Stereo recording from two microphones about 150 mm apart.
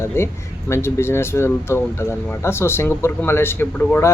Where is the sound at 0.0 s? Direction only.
15° left (ahead or behind).